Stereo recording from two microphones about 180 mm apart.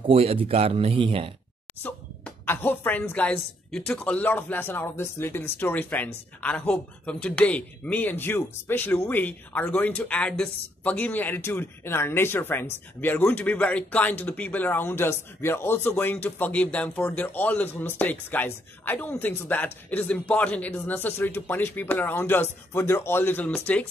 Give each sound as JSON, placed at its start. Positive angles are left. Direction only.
{"t": 0.0, "sound": "a man's voice", "side_deg": -35}
{"t": 1.8, "sound": "speech", "side_deg": 10}